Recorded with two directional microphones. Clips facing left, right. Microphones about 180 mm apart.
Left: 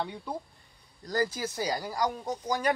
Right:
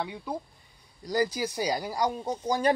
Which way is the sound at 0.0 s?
5° right (ahead or behind).